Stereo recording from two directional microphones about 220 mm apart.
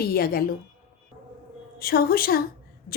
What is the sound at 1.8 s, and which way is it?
Speech, 45° left (ahead or behind).